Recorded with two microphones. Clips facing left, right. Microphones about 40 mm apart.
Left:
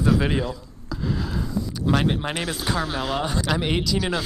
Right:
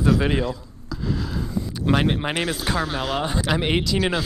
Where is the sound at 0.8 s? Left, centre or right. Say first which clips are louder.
Even; centre.